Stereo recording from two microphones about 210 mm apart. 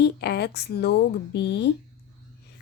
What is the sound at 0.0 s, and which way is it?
A woman's voice, 50° left (ahead or behind).